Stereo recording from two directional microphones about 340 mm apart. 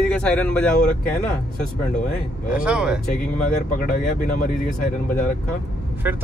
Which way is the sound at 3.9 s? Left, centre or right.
Left.